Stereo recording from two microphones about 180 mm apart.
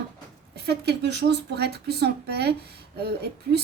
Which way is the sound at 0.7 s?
65° right (ahead or behind).